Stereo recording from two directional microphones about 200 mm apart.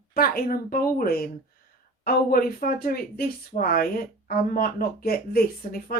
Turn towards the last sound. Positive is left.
turn(degrees=50)  # may be behind; listen again after turning